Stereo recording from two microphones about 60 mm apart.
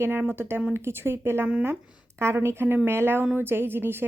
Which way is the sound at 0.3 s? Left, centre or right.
Right.